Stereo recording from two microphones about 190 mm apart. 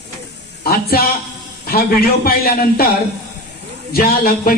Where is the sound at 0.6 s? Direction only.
50° left (ahead or behind).